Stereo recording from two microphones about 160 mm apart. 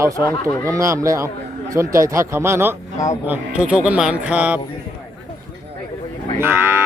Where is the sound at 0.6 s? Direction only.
20° right (ahead or behind).